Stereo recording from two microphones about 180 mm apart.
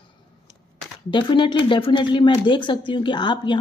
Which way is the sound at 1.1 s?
25° left (ahead or behind).